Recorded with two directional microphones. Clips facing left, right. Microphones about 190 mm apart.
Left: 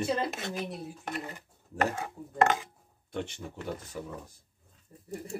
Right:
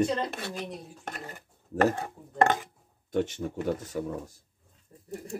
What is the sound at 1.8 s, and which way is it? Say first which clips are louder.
Speech: right 5 dB; 40° right (ahead or behind).